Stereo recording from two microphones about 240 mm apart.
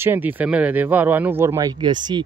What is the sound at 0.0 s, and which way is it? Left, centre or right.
Speech, centre.